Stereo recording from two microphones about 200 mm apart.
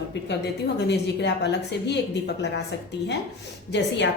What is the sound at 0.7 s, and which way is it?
A woman's voice, 60° left (ahead or behind).